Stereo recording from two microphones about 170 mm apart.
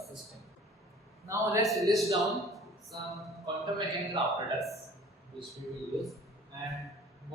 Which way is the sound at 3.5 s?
25° right (ahead or behind).